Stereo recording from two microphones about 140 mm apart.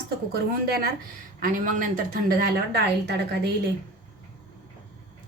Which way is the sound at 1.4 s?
75° right (ahead or behind).